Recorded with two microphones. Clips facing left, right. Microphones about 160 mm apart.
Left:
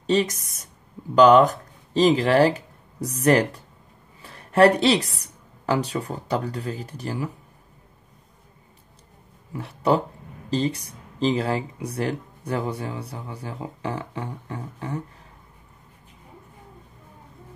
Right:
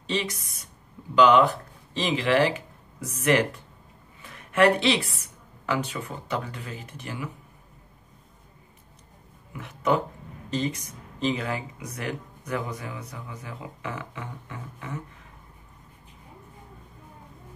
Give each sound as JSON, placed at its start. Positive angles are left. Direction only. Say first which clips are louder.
{"t": 0.0, "sound": "a woman's voice", "louder": "left 8 dB", "side_deg": 40}
{"t": 9.5, "sound": "speech", "louder": "left 3 dB", "side_deg": 35}